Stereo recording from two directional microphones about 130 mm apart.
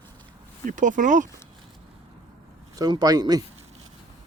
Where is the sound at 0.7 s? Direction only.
80° right.